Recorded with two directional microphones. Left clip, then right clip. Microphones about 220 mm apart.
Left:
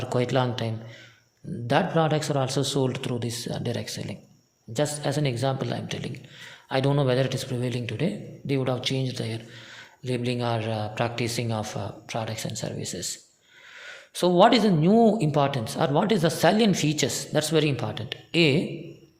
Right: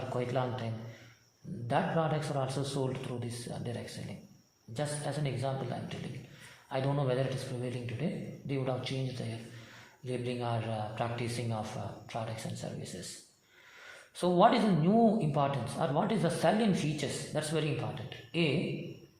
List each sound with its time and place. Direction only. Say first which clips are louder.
0.1 s a woman's voice: left 9 dB; 50° left (ahead or behind)